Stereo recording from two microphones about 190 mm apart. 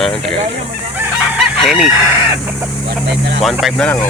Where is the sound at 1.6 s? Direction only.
Centre (ahead or behind).